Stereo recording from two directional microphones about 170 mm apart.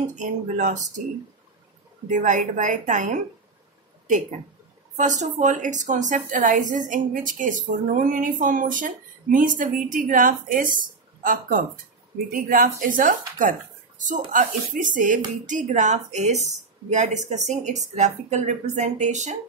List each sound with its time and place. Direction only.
0.0 s a woman's voice: 45° right (ahead or behind)
2.0 s a woman's voice: 50° right (ahead or behind)
4.9 s a woman's voice: 45° right (ahead or behind)